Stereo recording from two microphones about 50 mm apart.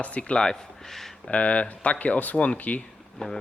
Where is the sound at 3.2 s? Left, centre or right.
Centre.